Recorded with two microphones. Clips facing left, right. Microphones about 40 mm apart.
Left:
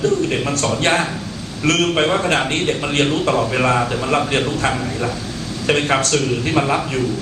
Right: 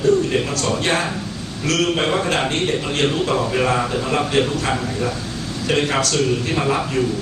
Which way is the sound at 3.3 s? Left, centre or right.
Centre.